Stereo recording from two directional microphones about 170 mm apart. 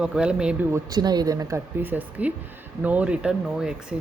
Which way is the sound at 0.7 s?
25° right (ahead or behind).